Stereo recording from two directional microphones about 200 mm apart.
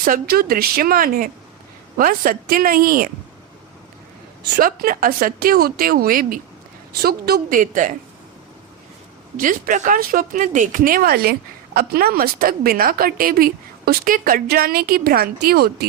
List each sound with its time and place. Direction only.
0.0 s speech: 45° right (ahead or behind)
4.5 s speech: 45° right (ahead or behind)
9.4 s speech: 40° right (ahead or behind)